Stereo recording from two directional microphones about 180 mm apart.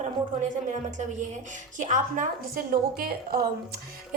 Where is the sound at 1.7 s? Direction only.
45° right (ahead or behind).